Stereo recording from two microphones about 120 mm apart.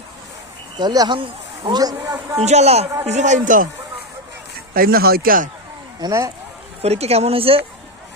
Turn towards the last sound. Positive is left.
turn(degrees=-50)  # may be behind; listen again after turning